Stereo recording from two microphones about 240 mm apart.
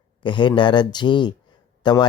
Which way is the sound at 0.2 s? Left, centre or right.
Centre.